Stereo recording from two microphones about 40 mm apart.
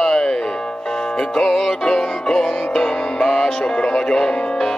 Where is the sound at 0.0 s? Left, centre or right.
Centre.